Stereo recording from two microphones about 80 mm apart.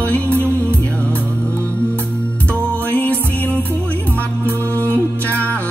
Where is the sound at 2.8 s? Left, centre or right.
Left.